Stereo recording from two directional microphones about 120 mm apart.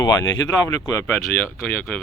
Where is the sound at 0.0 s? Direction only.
30° left (ahead or behind).